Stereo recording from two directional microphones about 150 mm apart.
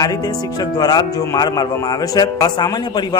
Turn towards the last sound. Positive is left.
turn(degrees=30)  # may be behind; listen again after turning